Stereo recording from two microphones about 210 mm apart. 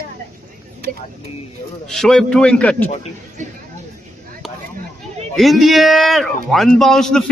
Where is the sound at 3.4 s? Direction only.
35° right (ahead or behind).